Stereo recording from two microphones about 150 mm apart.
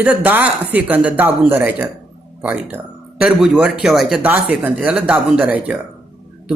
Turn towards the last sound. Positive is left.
turn(degrees=-10)  # may be behind; listen again after turning